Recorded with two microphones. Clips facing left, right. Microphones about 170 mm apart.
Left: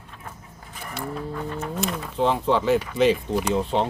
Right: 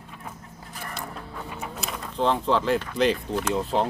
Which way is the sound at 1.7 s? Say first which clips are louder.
Left 3 dB; centre (ahead or behind).